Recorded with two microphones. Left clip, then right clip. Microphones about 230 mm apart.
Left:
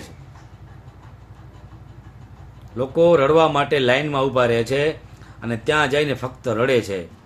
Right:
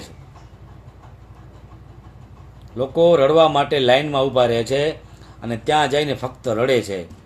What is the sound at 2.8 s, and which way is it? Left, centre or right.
A man's voice, centre.